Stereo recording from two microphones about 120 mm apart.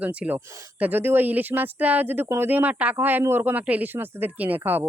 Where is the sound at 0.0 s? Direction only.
10° right (ahead or behind).